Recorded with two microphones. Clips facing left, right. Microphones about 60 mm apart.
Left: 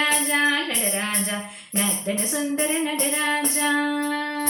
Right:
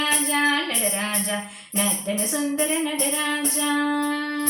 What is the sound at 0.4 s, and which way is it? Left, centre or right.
Music, centre.